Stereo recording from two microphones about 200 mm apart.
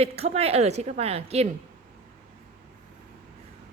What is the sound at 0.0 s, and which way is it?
A woman's voice, 30° right (ahead or behind).